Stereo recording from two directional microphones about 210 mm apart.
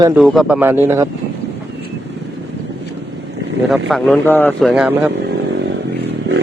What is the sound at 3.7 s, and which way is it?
Speech, centre (ahead or behind).